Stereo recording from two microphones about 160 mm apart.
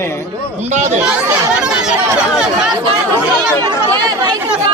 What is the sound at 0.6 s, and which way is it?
Speech, 50° right (ahead or behind).